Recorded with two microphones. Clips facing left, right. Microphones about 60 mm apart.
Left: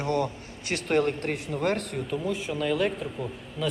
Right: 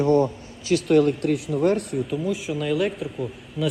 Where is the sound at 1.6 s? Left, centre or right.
Left.